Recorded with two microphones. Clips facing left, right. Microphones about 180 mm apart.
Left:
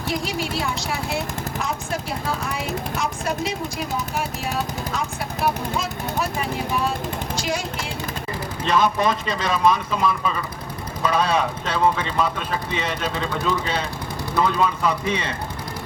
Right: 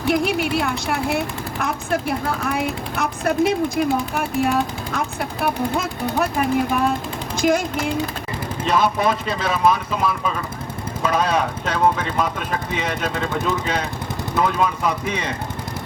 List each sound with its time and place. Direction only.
0.1 s a woman's voice: 60° right (ahead or behind)
8.6 s speech: 10° right (ahead or behind)
14.3 s speech: 5° right (ahead or behind)